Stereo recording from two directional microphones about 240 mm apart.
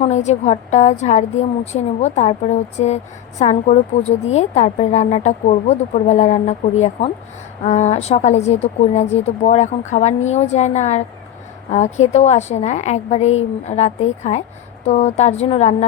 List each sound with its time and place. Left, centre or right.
0.0 s a woman's voice: left